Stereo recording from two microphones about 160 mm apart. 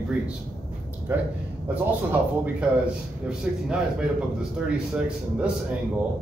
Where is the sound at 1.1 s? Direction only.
15° right (ahead or behind).